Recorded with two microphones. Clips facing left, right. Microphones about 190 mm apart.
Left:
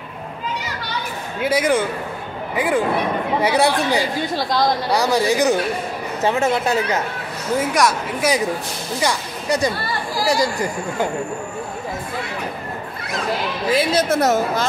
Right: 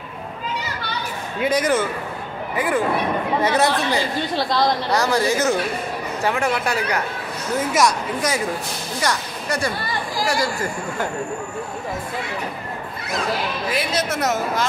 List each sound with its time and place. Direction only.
1.4 s speech: 10° left (ahead or behind)
7.7 s a woman's voice: centre (ahead or behind)
9.0 s speech: 15° left (ahead or behind)
13.7 s a woman's voice: 30° left (ahead or behind)